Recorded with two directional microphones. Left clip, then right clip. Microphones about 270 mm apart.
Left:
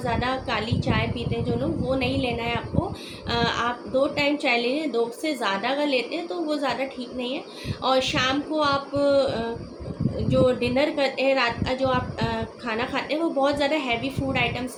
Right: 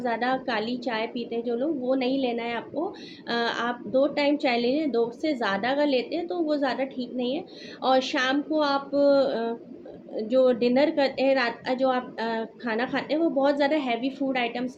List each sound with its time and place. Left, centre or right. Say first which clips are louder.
0.0 s a woman's voice: even; centre